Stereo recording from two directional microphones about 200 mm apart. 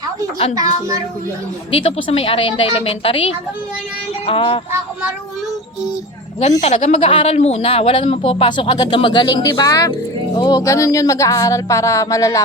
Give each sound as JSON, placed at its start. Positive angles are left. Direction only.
{"t": 0.5, "sound": "a child's voice", "side_deg": -15}
{"t": 2.0, "sound": "speech", "side_deg": 30}
{"t": 6.6, "sound": "speech", "side_deg": 35}